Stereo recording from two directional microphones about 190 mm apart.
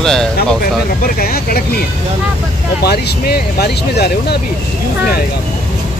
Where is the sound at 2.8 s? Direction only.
55° left (ahead or behind).